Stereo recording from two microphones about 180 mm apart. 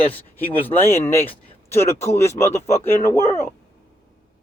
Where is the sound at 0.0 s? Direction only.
10° left (ahead or behind).